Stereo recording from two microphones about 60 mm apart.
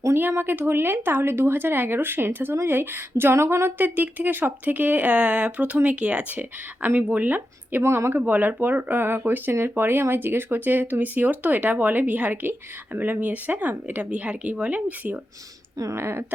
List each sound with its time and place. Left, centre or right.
0.2 s speech: right
3.8 s speech: right
7.8 s speech: right
8.1 s speech: right
16.0 s speech: right